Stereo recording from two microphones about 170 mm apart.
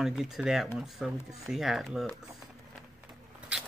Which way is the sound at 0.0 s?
Centre (ahead or behind).